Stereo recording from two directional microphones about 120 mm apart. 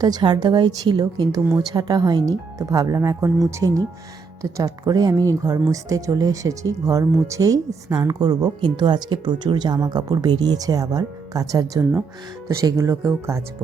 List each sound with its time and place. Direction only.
0.0 s a woman's voice: 35° right (ahead or behind)